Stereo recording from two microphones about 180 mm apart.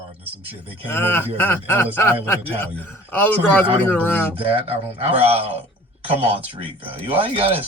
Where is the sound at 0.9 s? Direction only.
15° left (ahead or behind).